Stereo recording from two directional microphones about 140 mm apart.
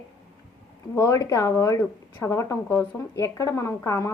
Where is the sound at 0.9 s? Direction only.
20° left (ahead or behind).